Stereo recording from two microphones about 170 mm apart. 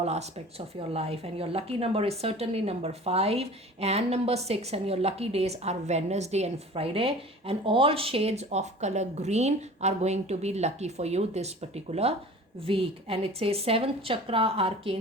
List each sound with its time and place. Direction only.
0.0 s a woman's voice: 40° right (ahead or behind)